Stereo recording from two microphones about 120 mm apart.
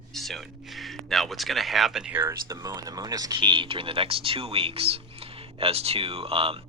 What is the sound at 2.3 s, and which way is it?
Speech, 30° right (ahead or behind).